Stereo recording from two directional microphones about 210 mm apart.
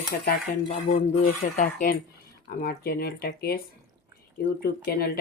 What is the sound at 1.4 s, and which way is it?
Speech, 30° left (ahead or behind).